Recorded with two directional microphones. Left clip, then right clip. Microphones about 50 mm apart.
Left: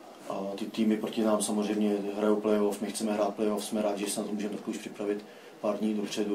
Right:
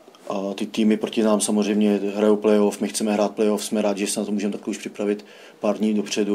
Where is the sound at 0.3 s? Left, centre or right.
Right.